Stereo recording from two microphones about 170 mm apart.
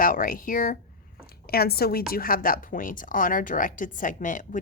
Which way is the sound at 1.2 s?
65° left (ahead or behind).